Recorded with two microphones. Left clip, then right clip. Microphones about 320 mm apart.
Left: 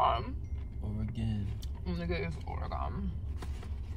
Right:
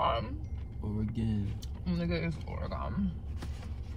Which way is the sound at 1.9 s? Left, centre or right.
Left.